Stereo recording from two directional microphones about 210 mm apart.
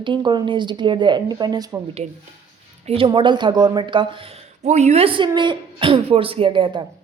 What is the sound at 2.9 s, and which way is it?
Speech, 25° right (ahead or behind).